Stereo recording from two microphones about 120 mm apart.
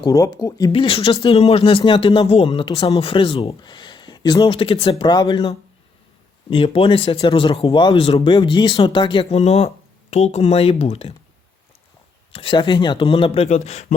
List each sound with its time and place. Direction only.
0.0 s speech: 30° left (ahead or behind)
0.7 s speech: 50° left (ahead or behind)
2.5 s speech: 40° left (ahead or behind)
2.8 s speech: 55° left (ahead or behind)
5.0 s speech: 35° left (ahead or behind)
9.3 s speech: 60° left (ahead or behind)
12.3 s speech: 50° left (ahead or behind); by 13.8 s 65° left (ahead or behind)